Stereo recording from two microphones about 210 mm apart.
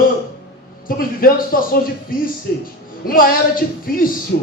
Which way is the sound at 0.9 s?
45° left (ahead or behind).